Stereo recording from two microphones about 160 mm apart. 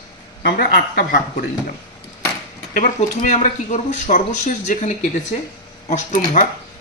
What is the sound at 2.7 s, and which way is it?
Speech, 50° left (ahead or behind).